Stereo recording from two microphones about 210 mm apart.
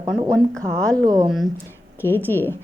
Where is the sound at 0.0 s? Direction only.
20° right (ahead or behind).